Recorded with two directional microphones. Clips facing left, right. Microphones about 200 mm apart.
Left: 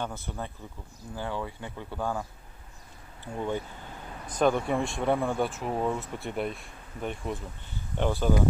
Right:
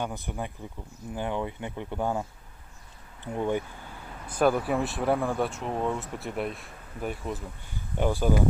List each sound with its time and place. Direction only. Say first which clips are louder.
0.0 s speech: right 2 dB; 15° right (ahead or behind)
3.3 s speech: right 3 dB; 15° right (ahead or behind)